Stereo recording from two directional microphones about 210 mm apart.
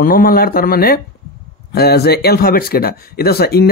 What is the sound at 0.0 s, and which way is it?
Speech, 45° left (ahead or behind).